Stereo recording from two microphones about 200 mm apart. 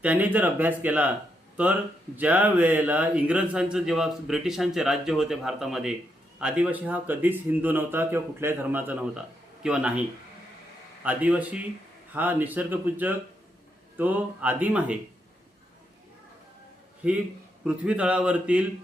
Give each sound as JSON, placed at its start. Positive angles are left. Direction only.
{"t": 0.0, "sound": "speech", "side_deg": -5}
{"t": 2.1, "sound": "a man's voice", "side_deg": -10}
{"t": 11.0, "sound": "speech", "side_deg": -5}
{"t": 17.0, "sound": "a man's voice", "side_deg": -5}